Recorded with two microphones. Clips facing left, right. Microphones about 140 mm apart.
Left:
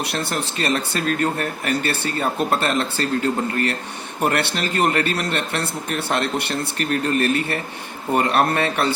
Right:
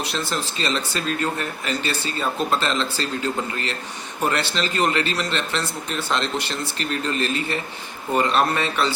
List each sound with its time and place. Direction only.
0.0 s speech: 65° left (ahead or behind)